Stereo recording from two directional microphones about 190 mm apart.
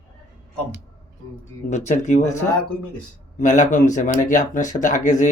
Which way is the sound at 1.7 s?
40° left (ahead or behind).